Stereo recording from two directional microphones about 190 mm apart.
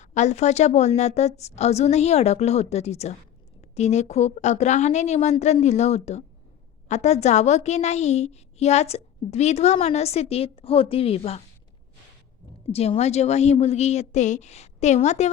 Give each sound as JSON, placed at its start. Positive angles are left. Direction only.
{"t": 0.0, "sound": "a woman's voice", "side_deg": 40}
{"t": 12.7, "sound": "a woman's voice", "side_deg": 35}